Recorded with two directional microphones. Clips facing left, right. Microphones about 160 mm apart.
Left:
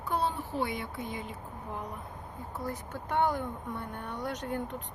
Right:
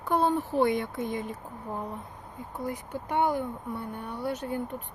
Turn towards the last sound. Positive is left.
turn(degrees=-10)  # may be behind; listen again after turning